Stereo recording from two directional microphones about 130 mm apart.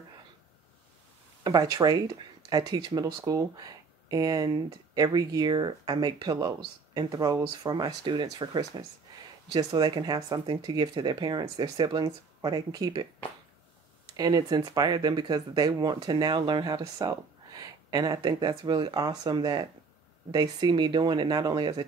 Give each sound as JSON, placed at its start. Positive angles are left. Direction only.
{"t": 1.4, "sound": "speech", "side_deg": -30}
{"t": 14.1, "sound": "speech", "side_deg": -30}